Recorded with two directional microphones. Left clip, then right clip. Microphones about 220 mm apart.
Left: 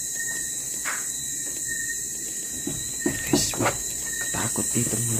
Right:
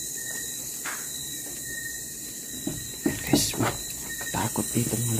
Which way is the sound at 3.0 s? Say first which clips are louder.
Even; 20° right (ahead or behind).